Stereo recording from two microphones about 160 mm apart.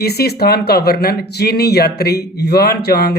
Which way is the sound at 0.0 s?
80° left.